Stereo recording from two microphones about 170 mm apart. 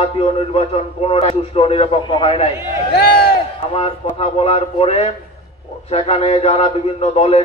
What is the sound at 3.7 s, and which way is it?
A man's voice, 35° left (ahead or behind).